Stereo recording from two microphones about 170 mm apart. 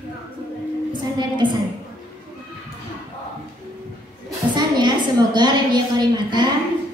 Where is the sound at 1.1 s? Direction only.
25° right (ahead or behind).